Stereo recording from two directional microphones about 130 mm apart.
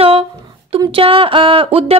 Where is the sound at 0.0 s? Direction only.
50° right (ahead or behind).